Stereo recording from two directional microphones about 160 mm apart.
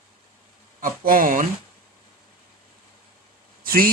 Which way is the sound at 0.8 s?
60° right (ahead or behind).